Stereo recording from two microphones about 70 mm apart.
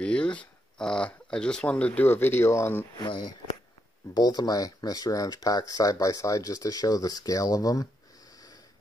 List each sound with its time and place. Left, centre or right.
0.0 s speech: centre
2.0 s speech: left
4.1 s speech: left